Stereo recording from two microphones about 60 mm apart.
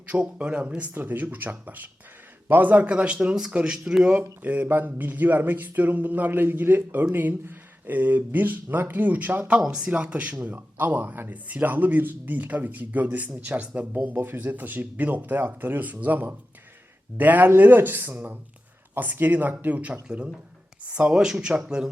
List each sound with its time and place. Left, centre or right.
0.1 s a man's voice: right
9.6 s speech: centre
9.8 s a man's voice: right